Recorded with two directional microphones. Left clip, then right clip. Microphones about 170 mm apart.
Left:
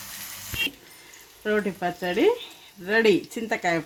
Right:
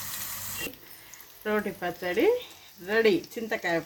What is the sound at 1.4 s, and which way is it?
Speech, 55° left (ahead or behind).